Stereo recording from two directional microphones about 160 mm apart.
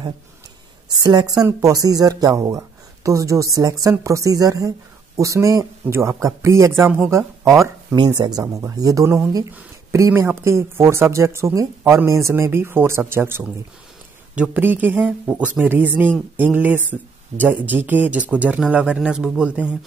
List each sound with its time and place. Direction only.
1.0 s speech: 25° right (ahead or behind); by 19.7 s 5° right (ahead or behind)